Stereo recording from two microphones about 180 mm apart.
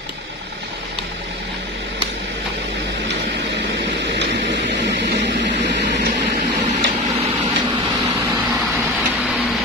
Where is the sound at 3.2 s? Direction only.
75° right (ahead or behind).